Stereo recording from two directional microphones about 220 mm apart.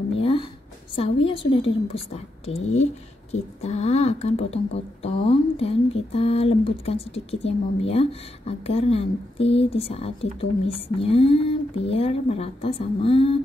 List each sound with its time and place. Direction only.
0.2 s a sound: 25° left (ahead or behind)
0.9 s speech: 25° left (ahead or behind)
2.7 s speech: 30° left (ahead or behind)